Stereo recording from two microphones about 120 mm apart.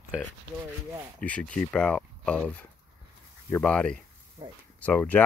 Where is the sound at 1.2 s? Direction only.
10° left (ahead or behind).